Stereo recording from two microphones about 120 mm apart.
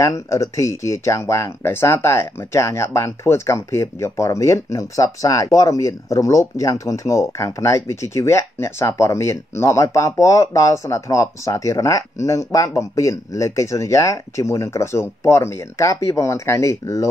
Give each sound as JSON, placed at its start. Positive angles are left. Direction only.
{"t": 0.0, "sound": "speech", "side_deg": 25}